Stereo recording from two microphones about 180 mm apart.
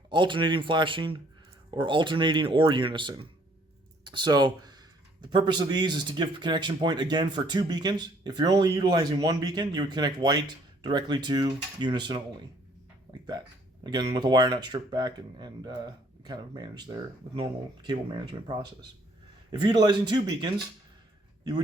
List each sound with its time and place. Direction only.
0.1 s speech: 25° right (ahead or behind)
13.1 s a sound: 25° right (ahead or behind)
13.8 s speech: 25° right (ahead or behind)